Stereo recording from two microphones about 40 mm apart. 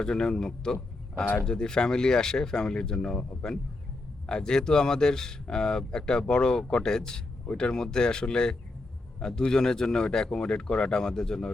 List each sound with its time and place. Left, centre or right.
0.0 s speech: centre